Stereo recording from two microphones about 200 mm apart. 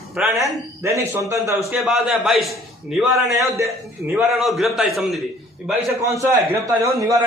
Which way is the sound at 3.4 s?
15° right (ahead or behind).